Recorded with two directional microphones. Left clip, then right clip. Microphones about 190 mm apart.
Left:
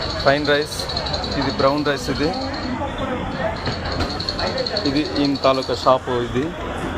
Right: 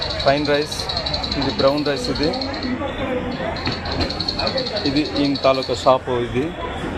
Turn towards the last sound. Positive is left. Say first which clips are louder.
# right 1 dB
turn(degrees=-10)  # may be behind; listen again after turning